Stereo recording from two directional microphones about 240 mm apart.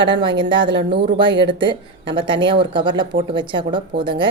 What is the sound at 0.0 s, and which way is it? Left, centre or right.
Speech, centre.